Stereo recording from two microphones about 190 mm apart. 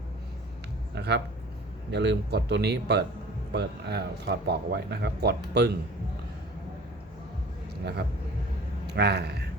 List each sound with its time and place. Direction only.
0.9 s a man's voice: 60° right (ahead or behind)
8.9 s a man's voice: 60° right (ahead or behind)